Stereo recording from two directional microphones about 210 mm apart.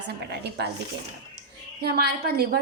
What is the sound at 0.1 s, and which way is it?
Speech, 50° right (ahead or behind).